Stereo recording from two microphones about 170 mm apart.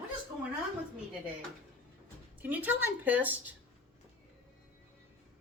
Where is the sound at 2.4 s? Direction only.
10° right (ahead or behind).